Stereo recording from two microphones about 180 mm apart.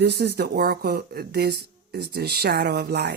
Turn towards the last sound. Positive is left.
turn(degrees=-65)  # may be behind; listen again after turning